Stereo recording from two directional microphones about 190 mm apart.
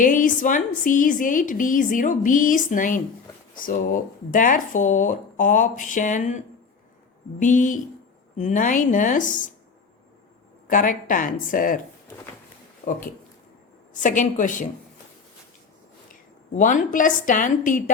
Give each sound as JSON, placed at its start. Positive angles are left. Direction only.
{"t": 0.0, "sound": "a woman's voice", "side_deg": 45}
{"t": 10.7, "sound": "a woman's voice", "side_deg": 45}
{"t": 12.8, "sound": "a woman's voice", "side_deg": 40}
{"t": 16.6, "sound": "a woman's voice", "side_deg": 40}